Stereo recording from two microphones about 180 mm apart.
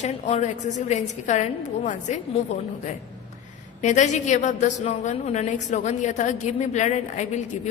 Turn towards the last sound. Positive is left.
turn(degrees=40)  # may be behind; listen again after turning